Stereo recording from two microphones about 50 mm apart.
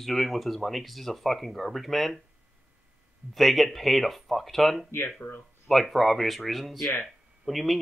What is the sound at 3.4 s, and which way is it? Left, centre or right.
Speech, centre.